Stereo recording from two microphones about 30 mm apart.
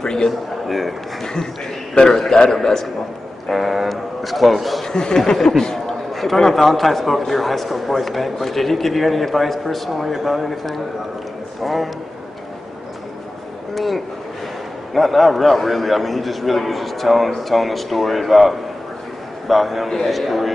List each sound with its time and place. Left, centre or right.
0.0 s a man's voice: left
0.7 s a man's voice: centre
2.5 s speech: centre
3.4 s a man's voice: centre
4.8 s speech: left
6.1 s a man's voice: centre
13.7 s a man's voice: centre